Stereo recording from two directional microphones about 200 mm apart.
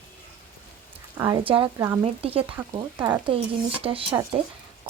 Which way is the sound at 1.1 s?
20° right (ahead or behind).